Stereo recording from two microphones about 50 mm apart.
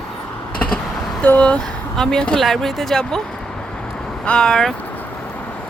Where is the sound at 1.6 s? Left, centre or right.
Centre.